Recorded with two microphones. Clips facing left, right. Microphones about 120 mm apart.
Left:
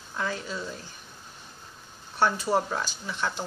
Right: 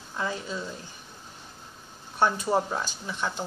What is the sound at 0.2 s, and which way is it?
Speech, 20° right (ahead or behind).